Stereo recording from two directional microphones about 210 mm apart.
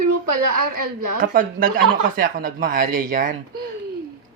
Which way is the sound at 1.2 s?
40° right (ahead or behind).